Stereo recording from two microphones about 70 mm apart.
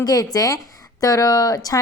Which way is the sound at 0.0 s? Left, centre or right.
Left.